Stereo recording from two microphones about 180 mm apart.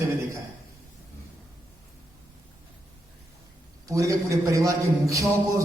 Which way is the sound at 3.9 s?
15° right (ahead or behind).